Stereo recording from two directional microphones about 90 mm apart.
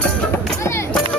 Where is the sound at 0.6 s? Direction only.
30° left (ahead or behind).